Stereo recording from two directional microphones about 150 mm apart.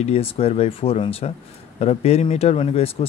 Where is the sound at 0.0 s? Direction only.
40° left (ahead or behind).